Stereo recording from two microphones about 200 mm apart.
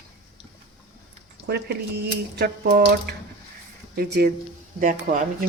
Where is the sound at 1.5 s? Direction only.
55° right (ahead or behind).